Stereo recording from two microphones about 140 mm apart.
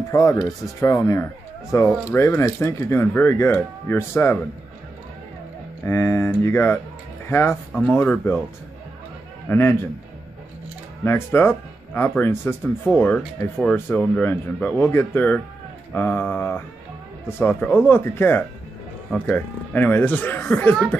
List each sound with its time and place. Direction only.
0.1 s speech: 25° left (ahead or behind)
5.9 s speech: 20° left (ahead or behind)
9.5 s speech: 15° left (ahead or behind)
11.1 s speech: 15° left (ahead or behind)